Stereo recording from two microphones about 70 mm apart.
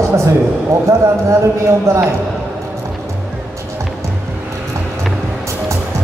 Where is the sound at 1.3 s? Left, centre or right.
Right.